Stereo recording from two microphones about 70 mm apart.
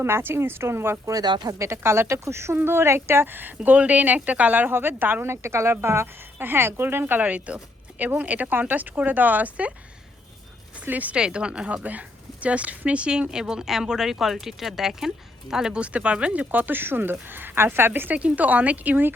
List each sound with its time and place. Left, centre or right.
0.0 s speech: right
1.2 s speech: right
1.5 s speech: right
10.8 s speech: right
18.2 s speech: centre